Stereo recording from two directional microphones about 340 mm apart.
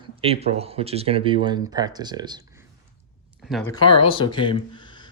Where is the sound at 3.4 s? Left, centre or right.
Centre.